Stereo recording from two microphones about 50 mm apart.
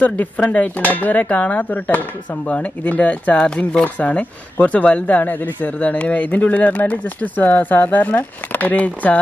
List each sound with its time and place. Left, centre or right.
0.0 s speech: left
3.3 s speech: centre